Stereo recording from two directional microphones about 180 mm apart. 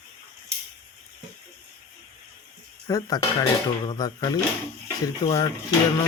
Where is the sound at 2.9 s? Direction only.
20° left (ahead or behind).